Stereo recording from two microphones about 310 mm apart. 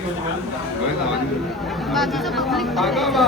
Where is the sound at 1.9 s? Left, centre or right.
Centre.